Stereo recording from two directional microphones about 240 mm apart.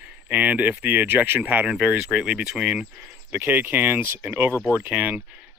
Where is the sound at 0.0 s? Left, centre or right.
Centre.